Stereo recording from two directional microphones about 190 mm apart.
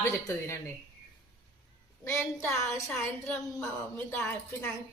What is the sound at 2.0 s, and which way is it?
Speech, 15° left (ahead or behind).